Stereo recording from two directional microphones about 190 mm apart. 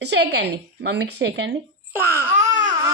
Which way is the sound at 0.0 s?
65° right (ahead or behind).